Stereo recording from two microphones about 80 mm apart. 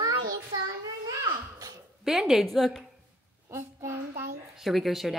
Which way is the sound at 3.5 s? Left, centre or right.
Right.